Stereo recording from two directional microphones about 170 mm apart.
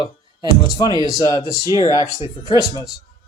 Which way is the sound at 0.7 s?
25° left (ahead or behind).